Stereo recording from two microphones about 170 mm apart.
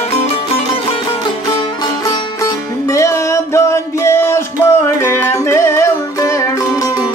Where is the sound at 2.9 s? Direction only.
20° left (ahead or behind).